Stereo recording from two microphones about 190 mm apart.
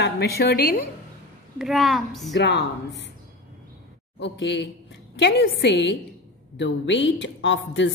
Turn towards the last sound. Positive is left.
turn(degrees=70)  # may be behind; listen again after turning